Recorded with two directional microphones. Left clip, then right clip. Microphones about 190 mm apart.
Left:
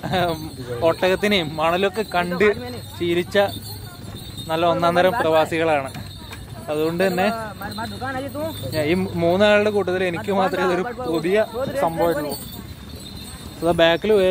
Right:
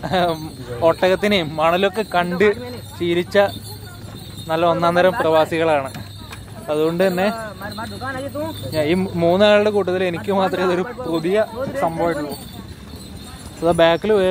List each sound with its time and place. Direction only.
0.0 s speech: 25° right (ahead or behind)
3.0 s speech: 15° right (ahead or behind)
7.3 s a sound: 65° left (ahead or behind)
8.7 s speech: 15° right (ahead or behind)
13.6 s speech: 10° right (ahead or behind)